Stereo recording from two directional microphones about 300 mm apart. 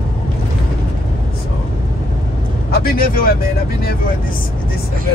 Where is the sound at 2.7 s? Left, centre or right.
Left.